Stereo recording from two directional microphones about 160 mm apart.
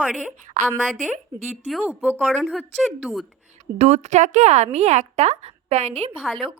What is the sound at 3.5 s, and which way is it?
A woman's voice, 45° right (ahead or behind).